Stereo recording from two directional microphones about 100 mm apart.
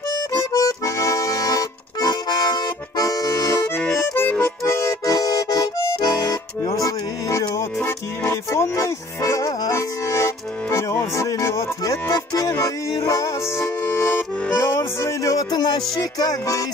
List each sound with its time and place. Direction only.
0.3 s accordion: 35° left (ahead or behind)
4.2 s accordion: 20° left (ahead or behind)
4.7 s accordion: 30° left (ahead or behind)